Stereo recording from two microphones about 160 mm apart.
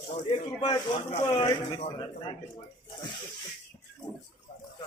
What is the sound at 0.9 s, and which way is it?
A man's voice, 40° left (ahead or behind).